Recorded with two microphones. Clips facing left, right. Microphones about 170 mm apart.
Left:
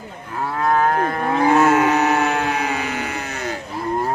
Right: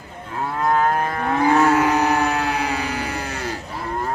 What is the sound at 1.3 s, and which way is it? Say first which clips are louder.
Livestock: left 1 dB; 15° left (ahead or behind).